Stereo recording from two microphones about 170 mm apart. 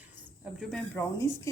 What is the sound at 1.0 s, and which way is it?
Speech, 15° left (ahead or behind).